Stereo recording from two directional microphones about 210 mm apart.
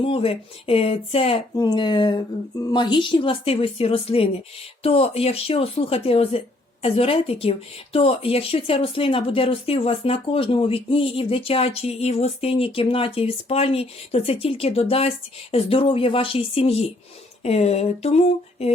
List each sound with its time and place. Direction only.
0.0 s speech: 25° left (ahead or behind)